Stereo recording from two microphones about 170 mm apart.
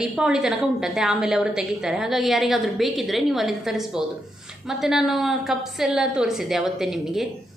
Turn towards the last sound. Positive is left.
turn(degrees=0)  # may be behind; listen again after turning